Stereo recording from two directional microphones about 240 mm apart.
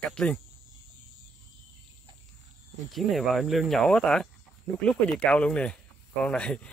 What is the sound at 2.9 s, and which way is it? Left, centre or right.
Speech, centre.